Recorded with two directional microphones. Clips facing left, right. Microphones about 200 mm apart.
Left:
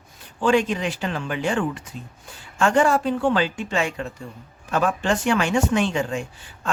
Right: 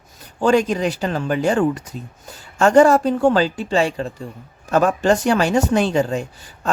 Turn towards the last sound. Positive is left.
turn(degrees=-40)  # may be behind; listen again after turning